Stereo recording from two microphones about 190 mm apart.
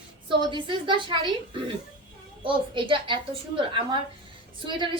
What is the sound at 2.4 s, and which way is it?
A woman's voice, 25° right (ahead or behind).